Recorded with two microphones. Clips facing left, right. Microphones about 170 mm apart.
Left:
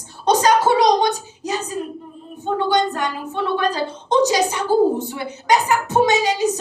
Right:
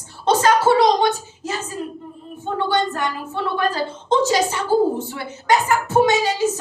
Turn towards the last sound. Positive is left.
turn(degrees=15)  # may be behind; listen again after turning